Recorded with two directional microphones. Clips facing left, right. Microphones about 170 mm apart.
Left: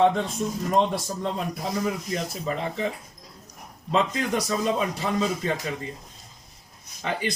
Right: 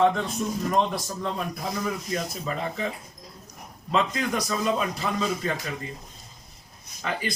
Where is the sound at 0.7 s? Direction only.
25° left (ahead or behind).